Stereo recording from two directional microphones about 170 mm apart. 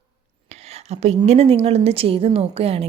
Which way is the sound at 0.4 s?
40° right (ahead or behind).